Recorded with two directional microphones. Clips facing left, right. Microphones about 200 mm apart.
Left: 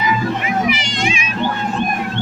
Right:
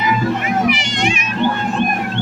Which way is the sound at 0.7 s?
65° right (ahead or behind).